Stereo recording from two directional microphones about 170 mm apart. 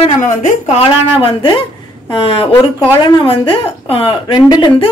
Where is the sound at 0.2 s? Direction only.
50° left (ahead or behind).